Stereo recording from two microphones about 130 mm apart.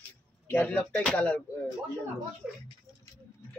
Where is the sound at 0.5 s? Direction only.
10° left (ahead or behind).